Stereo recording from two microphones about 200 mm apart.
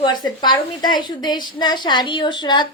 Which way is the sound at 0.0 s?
20° left (ahead or behind).